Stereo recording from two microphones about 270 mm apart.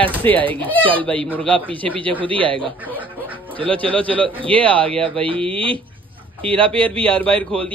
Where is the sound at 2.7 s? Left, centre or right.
Centre.